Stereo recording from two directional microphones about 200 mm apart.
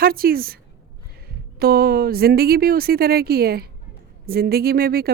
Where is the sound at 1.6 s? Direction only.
50° right (ahead or behind).